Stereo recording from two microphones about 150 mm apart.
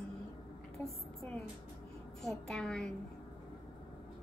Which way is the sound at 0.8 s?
10° left (ahead or behind).